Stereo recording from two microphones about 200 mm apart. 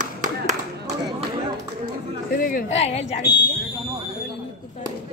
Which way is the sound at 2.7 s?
35° left (ahead or behind).